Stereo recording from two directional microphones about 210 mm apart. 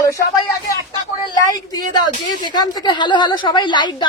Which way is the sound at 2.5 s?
20° left (ahead or behind).